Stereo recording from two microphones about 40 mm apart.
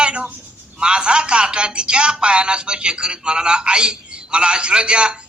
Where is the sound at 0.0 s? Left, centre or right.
Right.